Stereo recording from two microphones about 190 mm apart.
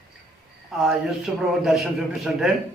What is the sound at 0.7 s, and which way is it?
A man's voice, centre (ahead or behind).